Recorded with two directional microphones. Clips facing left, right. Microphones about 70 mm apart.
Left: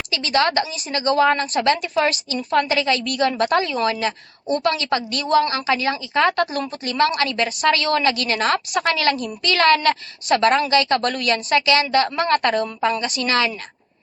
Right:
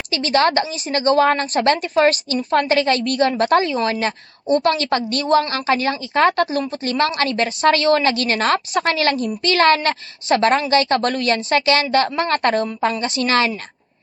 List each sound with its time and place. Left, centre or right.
0.1 s a woman's voice: right
4.8 s a woman's voice: right